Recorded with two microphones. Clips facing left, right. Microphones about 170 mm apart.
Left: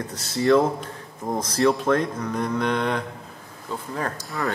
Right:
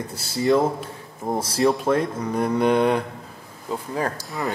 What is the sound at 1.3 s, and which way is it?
Speech, 30° right (ahead or behind).